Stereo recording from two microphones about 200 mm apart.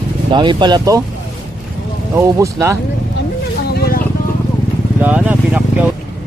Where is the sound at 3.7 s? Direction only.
50° left (ahead or behind).